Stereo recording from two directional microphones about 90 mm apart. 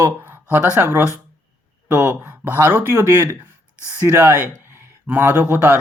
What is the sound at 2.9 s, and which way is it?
Speech, 40° right (ahead or behind).